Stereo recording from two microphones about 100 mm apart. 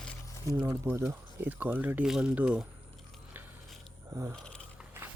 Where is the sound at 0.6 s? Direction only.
30° right (ahead or behind); by 2.7 s 10° right (ahead or behind).